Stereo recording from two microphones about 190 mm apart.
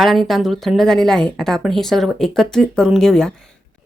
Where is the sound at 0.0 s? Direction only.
Centre (ahead or behind).